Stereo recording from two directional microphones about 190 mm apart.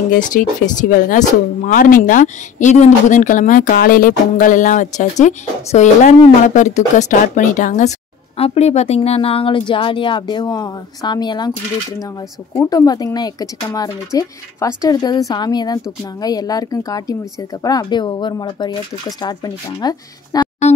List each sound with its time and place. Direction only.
0.1 s a woman's voice: 45° left (ahead or behind); by 11.5 s 20° left (ahead or behind)
12.6 s a woman's voice: 20° left (ahead or behind)